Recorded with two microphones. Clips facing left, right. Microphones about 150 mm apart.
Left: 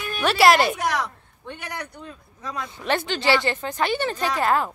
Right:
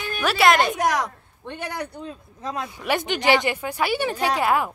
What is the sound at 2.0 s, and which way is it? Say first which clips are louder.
Speech: right 4 dB; 30° right (ahead or behind).